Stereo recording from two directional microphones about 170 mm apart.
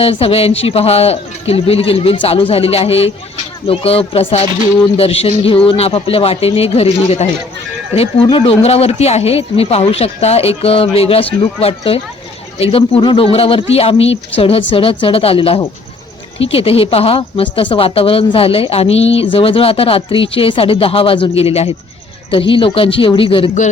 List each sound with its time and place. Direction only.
0.0 s a woman's voice: 35° left (ahead or behind)